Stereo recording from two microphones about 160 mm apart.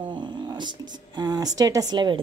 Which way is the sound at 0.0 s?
30° right (ahead or behind).